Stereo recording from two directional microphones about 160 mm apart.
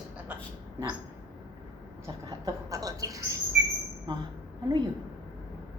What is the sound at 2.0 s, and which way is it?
Mouse, 20° right (ahead or behind).